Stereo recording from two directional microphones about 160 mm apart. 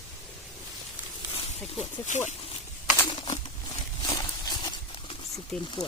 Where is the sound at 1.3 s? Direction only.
45° left (ahead or behind).